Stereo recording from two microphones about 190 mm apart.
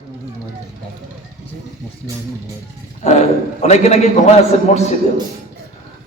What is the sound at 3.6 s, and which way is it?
A man's voice, 35° left (ahead or behind).